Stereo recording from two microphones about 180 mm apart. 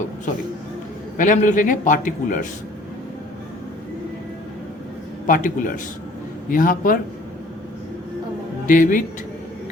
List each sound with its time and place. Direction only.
1.1 s a man's voice: 45° left (ahead or behind)
5.2 s a man's voice: 45° left (ahead or behind)
8.6 s a man's voice: 50° left (ahead or behind)